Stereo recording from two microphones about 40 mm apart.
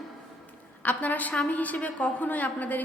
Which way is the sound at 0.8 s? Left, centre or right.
Left.